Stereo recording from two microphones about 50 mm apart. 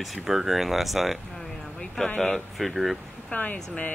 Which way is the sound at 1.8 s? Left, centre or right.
Centre.